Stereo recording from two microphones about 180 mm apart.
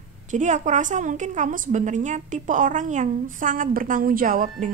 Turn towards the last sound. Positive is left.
turn(degrees=-50)  # may be behind; listen again after turning